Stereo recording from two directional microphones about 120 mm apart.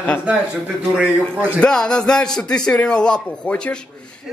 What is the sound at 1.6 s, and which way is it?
A man's voice, 5° left (ahead or behind).